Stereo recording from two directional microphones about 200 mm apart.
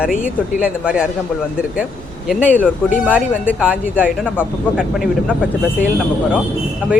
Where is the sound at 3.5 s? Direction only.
5° right (ahead or behind).